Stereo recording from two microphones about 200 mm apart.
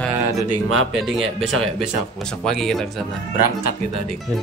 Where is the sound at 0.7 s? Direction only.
90° right.